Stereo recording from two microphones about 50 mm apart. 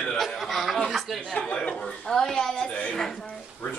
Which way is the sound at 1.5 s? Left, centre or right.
Left.